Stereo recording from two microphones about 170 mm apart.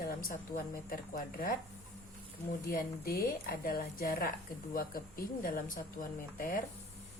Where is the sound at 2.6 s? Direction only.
60° left (ahead or behind).